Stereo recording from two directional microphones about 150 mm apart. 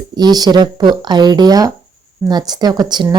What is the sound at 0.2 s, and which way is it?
Speech, 25° right (ahead or behind).